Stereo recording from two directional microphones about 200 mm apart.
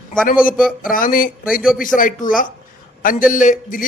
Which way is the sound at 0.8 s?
45° left (ahead or behind).